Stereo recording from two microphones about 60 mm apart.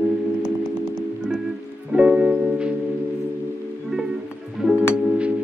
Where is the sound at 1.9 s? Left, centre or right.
Centre.